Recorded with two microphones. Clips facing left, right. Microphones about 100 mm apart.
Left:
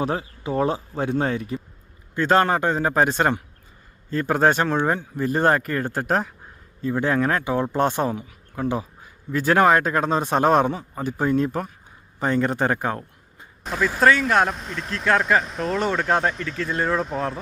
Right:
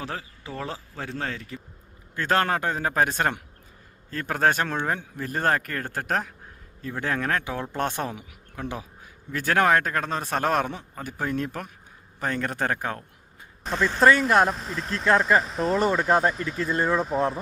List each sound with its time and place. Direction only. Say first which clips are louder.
0.0 s speech: left 9 dB; 20° left (ahead or behind)
2.3 s speech: left 5 dB; 10° left (ahead or behind)
10.7 s speech: left 8 dB; 5° left (ahead or behind)